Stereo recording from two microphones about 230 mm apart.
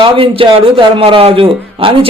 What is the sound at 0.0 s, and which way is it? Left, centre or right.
A man's voice, right.